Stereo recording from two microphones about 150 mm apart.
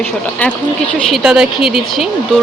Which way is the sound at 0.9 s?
Centre (ahead or behind).